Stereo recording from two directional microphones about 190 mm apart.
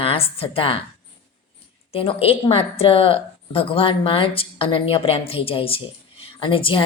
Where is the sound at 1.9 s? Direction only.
30° left (ahead or behind).